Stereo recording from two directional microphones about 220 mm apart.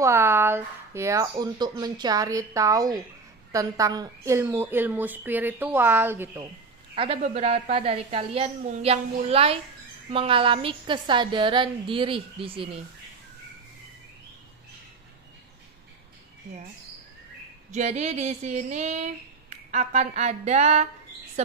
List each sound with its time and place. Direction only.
0.0 s speech: 10° right (ahead or behind)
7.2 s a woman's voice: 30° right (ahead or behind)
17.6 s speech: 30° right (ahead or behind)